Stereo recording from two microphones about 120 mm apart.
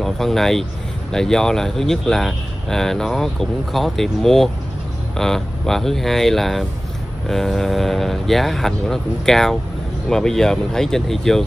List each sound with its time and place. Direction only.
0.0 s speech: 5° left (ahead or behind)